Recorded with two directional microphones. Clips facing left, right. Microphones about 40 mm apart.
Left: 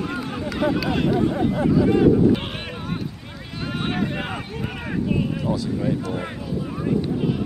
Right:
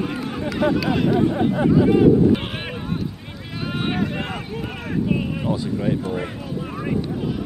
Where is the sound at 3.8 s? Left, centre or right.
Centre.